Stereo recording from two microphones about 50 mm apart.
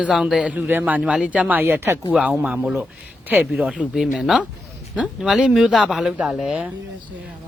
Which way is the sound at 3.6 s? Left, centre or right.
Right.